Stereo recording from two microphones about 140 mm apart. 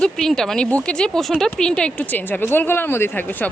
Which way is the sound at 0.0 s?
5° left (ahead or behind).